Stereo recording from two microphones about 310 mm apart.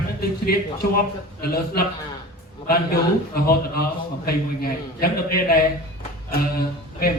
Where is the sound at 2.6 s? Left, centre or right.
Left.